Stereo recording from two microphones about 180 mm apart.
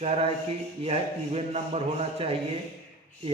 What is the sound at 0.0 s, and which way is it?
A man's voice, 35° right (ahead or behind).